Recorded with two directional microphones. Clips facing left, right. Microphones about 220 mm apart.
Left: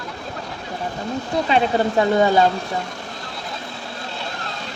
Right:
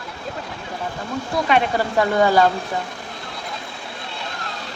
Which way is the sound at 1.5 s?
30° left (ahead or behind).